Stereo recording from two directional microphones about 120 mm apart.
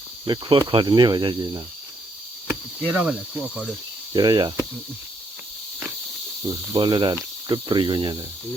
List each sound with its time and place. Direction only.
0.3 s cricket: 40° right (ahead or behind)
2.5 s cricket: 10° right (ahead or behind)
4.1 s cricket: 35° right (ahead or behind)
6.4 s cricket: 40° right (ahead or behind)
7.4 s speech: 40° right (ahead or behind)